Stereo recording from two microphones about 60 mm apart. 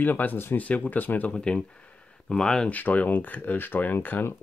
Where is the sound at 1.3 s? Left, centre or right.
Centre.